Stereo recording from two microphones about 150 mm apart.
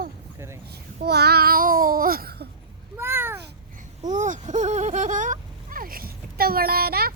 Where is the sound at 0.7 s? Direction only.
90° right.